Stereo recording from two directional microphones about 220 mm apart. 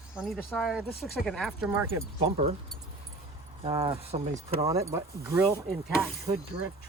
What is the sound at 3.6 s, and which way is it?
Speech, 25° right (ahead or behind).